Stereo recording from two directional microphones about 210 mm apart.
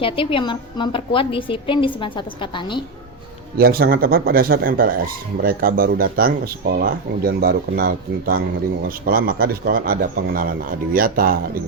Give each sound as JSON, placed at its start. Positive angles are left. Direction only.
{"t": 0.0, "sound": "a woman's voice", "side_deg": 25}
{"t": 3.6, "sound": "a man's voice", "side_deg": -45}